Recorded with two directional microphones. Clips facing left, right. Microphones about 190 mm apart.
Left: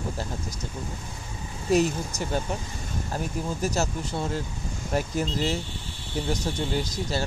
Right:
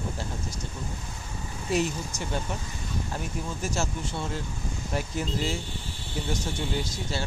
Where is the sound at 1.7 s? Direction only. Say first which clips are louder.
Left 5 dB; 40° left (ahead or behind).